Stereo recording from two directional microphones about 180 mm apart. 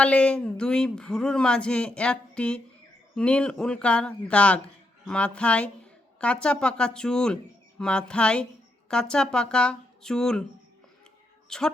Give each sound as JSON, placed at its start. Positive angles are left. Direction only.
{"t": 0.0, "sound": "speech", "side_deg": 5}
{"t": 11.4, "sound": "a woman's voice", "side_deg": 5}